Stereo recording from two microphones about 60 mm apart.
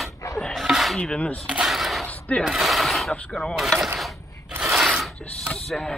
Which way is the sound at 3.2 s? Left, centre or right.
Centre.